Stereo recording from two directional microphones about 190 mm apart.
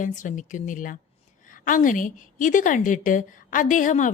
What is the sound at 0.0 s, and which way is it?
A woman's voice, 40° left (ahead or behind).